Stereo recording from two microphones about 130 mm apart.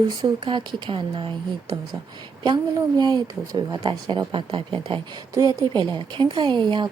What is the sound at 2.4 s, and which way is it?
Speech, 35° right (ahead or behind).